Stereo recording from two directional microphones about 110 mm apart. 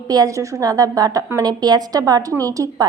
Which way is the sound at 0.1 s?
30° right (ahead or behind).